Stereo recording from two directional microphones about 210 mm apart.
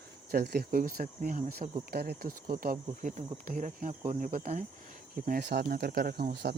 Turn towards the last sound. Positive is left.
turn(degrees=-50)  # may be behind; listen again after turning